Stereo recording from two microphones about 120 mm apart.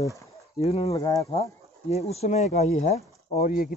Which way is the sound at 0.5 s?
60° left (ahead or behind).